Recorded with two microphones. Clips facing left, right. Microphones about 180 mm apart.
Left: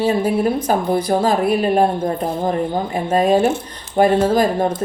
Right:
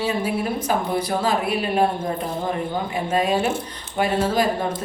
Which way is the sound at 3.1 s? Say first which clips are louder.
Left 7 dB; 45° left (ahead or behind).